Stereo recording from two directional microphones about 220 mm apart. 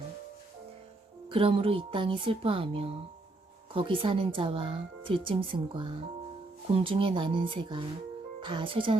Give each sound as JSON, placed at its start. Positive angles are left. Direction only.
{"t": 1.3, "sound": "speech", "side_deg": -25}